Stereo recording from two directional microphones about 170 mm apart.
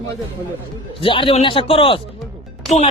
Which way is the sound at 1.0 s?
30° left (ahead or behind).